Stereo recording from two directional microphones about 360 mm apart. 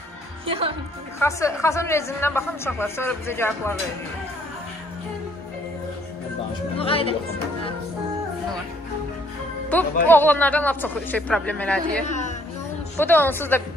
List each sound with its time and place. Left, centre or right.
0.5 s a woman's voice: centre
1.2 s a man's voice: centre
6.8 s a man's voice: centre
10.0 s speech: centre
12.1 s music: centre
12.9 s speech: centre